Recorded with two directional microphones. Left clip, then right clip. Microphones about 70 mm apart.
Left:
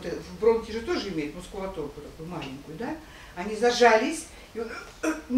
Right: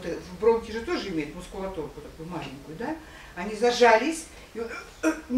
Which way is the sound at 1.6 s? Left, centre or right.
Centre.